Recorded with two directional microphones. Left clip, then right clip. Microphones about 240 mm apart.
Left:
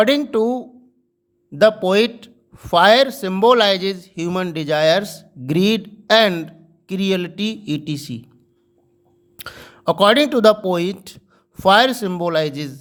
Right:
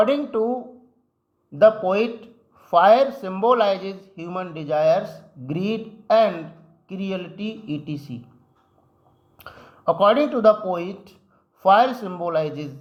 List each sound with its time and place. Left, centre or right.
0.0 s speech: left
6.9 s speech: left
9.6 s speech: left